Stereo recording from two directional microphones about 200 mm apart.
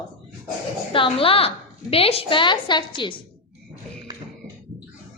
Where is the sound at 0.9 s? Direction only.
25° left (ahead or behind).